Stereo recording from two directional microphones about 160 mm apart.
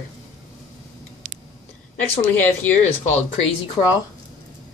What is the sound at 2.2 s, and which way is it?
Speech, 10° left (ahead or behind).